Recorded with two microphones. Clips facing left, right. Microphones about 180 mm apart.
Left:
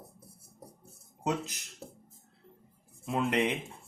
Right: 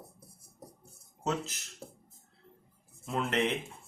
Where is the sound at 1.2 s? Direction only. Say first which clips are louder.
Left 1 dB; 15° left (ahead or behind).